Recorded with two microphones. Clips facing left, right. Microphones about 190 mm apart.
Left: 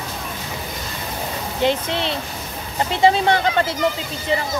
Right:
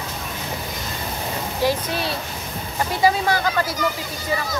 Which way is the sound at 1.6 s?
20° left (ahead or behind).